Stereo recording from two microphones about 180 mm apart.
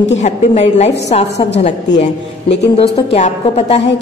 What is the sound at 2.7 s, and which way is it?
A woman's voice, 35° left (ahead or behind).